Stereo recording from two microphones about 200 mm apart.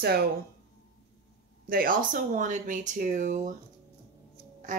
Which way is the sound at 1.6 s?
45° right (ahead or behind).